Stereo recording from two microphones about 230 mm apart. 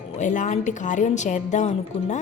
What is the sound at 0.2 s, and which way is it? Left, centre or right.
A woman's voice, left.